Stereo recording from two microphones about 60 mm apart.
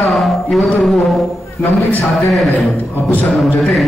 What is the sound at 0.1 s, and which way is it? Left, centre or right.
Music, centre.